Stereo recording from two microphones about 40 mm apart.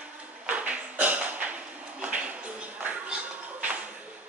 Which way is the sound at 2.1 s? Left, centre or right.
Right.